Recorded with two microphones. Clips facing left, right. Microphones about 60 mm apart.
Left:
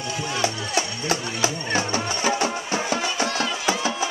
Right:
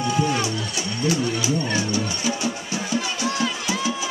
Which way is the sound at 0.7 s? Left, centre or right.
Left.